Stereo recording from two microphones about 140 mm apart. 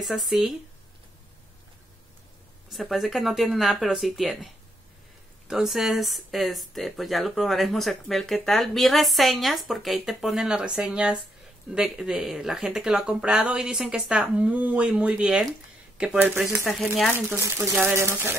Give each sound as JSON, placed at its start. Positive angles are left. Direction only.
{"t": 0.0, "sound": "speech", "side_deg": 0}
{"t": 2.7, "sound": "speech", "side_deg": 0}
{"t": 5.5, "sound": "speech", "side_deg": -5}
{"t": 17.9, "sound": "speech", "side_deg": -15}